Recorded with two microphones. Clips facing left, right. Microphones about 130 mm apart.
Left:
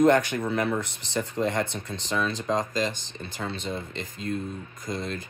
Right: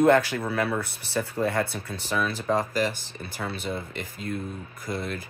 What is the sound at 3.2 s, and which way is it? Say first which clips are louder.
Speech: even; 20° left (ahead or behind).